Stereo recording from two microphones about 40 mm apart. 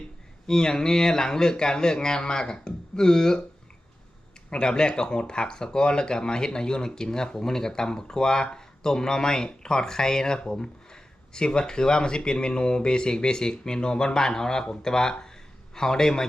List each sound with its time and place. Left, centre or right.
0.4 s speech: centre
4.5 s speech: left